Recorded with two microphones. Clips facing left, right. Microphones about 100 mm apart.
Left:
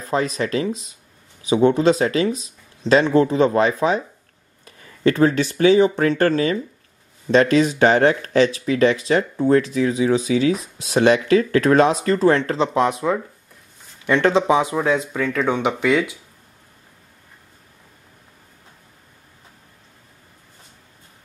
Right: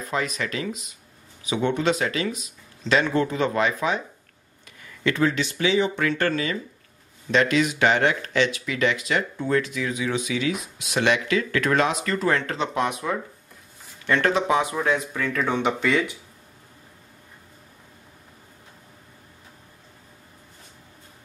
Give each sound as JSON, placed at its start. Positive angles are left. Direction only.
{"t": 0.0, "sound": "speech", "side_deg": 35}